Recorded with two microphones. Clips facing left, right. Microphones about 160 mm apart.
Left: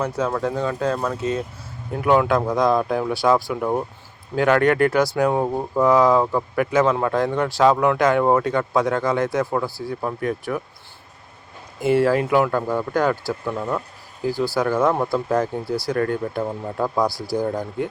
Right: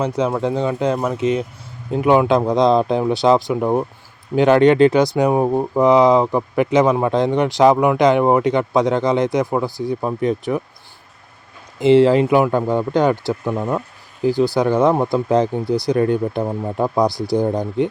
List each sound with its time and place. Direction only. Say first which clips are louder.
0.0 s speech: right 4 dB; 20° right (ahead or behind)
11.8 s speech: right 6 dB; 20° right (ahead or behind)